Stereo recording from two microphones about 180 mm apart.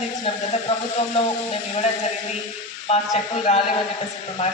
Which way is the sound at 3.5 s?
40° left (ahead or behind).